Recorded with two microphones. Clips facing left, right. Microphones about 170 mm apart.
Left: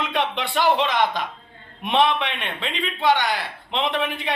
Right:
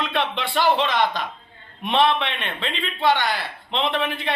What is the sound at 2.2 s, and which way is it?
Speech, 5° left (ahead or behind).